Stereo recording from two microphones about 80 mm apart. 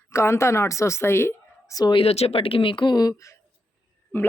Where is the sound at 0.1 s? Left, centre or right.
Left.